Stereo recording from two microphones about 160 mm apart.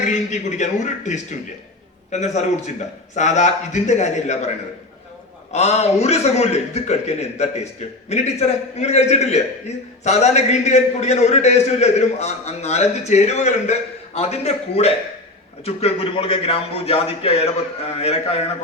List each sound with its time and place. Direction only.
0.0 s a man's voice: 50° left (ahead or behind)